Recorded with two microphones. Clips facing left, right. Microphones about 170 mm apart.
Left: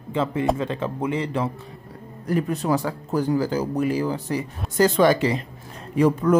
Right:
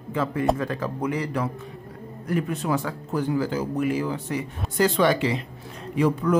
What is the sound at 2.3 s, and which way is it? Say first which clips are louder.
Speech: left 3 dB; 35° left (ahead or behind).